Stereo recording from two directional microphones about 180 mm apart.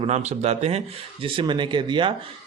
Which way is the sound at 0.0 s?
40° right (ahead or behind).